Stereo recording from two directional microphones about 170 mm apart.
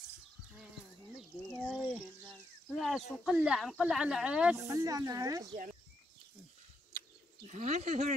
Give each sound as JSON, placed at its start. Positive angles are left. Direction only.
{"t": 1.6, "sound": "speech", "side_deg": 0}
{"t": 4.6, "sound": "speech", "side_deg": -20}
{"t": 7.4, "sound": "speech", "side_deg": -45}